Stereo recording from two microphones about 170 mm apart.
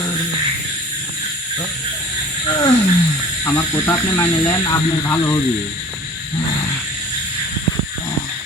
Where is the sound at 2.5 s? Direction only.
25° left (ahead or behind).